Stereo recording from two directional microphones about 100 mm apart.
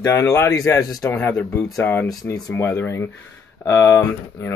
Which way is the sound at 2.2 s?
35° left (ahead or behind).